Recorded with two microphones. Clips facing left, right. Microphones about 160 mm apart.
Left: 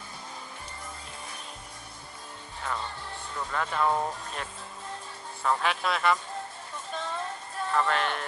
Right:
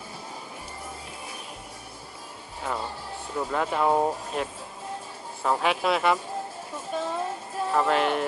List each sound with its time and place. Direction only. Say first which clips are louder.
2.6 s speech: right 3 dB; 10° right (ahead or behind)
3.9 s speech: right 6 dB; 25° right (ahead or behind)
5.4 s speech: right 3 dB; 10° right (ahead or behind)
6.9 s music: right 6 dB; 10° right (ahead or behind)
7.7 s speech: right 4 dB; 10° right (ahead or behind)